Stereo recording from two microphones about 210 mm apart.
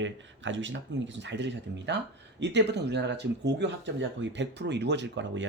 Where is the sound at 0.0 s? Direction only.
60° right (ahead or behind).